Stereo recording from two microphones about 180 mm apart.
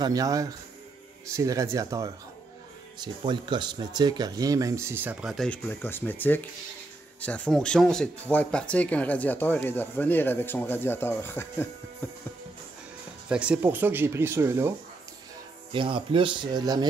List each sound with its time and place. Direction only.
0.0 s speech: 20° right (ahead or behind); by 11.7 s 10° left (ahead or behind)
13.3 s speech: 5° right (ahead or behind)
15.7 s speech: 30° right (ahead or behind)